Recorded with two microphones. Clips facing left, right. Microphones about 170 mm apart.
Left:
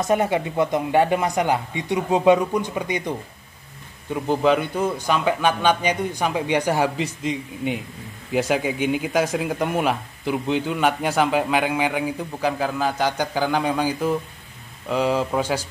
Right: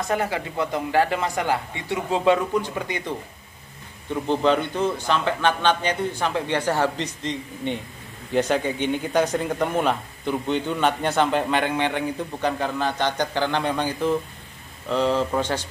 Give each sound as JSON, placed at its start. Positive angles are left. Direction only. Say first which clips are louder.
{"t": 0.0, "sound": "speech", "louder": "left 4 dB", "side_deg": 25}
{"t": 4.1, "sound": "speech", "louder": "left 1 dB", "side_deg": 5}